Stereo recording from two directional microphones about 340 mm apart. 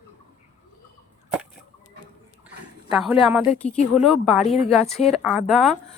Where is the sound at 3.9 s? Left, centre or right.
Centre.